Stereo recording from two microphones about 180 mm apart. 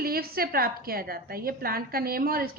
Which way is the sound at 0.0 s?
55° right (ahead or behind).